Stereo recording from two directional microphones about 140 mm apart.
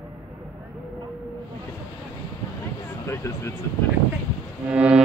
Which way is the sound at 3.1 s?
20° left (ahead or behind).